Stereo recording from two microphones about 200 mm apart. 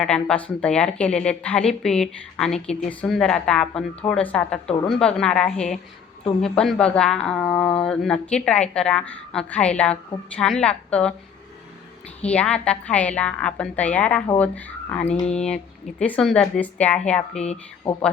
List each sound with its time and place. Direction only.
0.0 s a woman's voice: 5° left (ahead or behind)
12.2 s a woman's voice: 5° left (ahead or behind)
15.0 s speech: 30° left (ahead or behind)
15.3 s a woman's voice: 5° left (ahead or behind)
17.4 s speech: 35° left (ahead or behind)